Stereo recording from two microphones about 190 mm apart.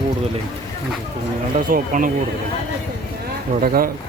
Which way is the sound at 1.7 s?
45° right (ahead or behind).